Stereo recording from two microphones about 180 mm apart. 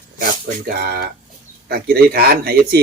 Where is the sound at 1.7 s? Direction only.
60° right (ahead or behind).